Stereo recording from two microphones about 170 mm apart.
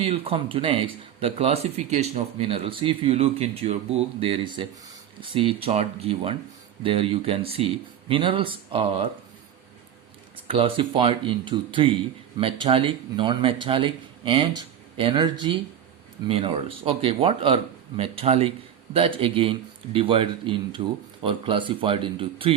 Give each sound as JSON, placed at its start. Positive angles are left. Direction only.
{"t": 0.0, "sound": "speech", "side_deg": -35}
{"t": 10.5, "sound": "speech", "side_deg": -30}